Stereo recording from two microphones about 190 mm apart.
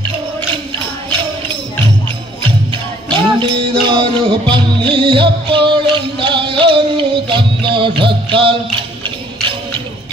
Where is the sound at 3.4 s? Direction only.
25° right (ahead or behind).